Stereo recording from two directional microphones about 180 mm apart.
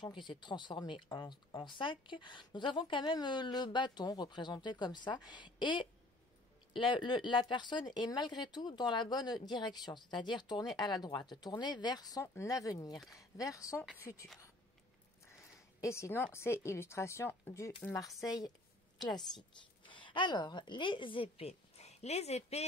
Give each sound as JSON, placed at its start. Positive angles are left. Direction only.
{"t": 0.0, "sound": "speech", "side_deg": 25}
{"t": 15.4, "sound": "a sound", "side_deg": 15}
{"t": 16.3, "sound": "a woman's voice", "side_deg": 15}